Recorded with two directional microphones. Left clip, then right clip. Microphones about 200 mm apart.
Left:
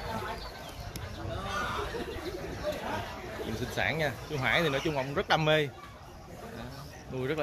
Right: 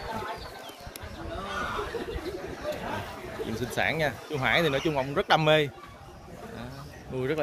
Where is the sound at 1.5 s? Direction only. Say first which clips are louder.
Right 1 dB; 55° left (ahead or behind).